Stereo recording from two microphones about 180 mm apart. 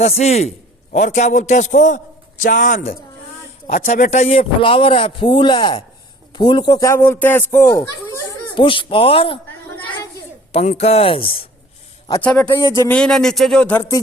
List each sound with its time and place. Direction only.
0.0 s a man's voice: 35° left (ahead or behind); by 8.6 s 15° left (ahead or behind)
8.6 s a man's voice: 30° left (ahead or behind)
10.5 s a man's voice: 35° left (ahead or behind)
12.2 s speech: 5° left (ahead or behind)
12.5 s a man's voice: 20° left (ahead or behind)
12.9 s speech: 5° left (ahead or behind)